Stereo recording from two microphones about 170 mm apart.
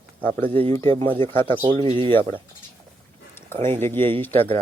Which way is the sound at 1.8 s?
30° right (ahead or behind).